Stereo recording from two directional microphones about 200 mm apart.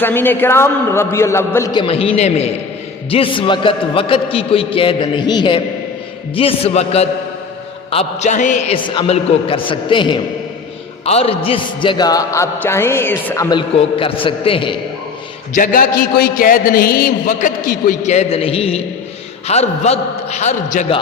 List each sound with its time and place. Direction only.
0.0 s a man's voice: 10° left (ahead or behind); by 14.8 s 25° left (ahead or behind)
15.5 s a man's voice: 45° left (ahead or behind)